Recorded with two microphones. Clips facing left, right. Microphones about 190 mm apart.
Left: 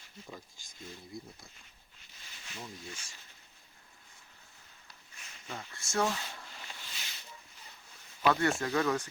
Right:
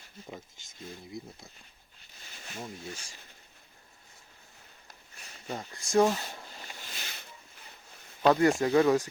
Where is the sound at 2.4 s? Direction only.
45° right (ahead or behind).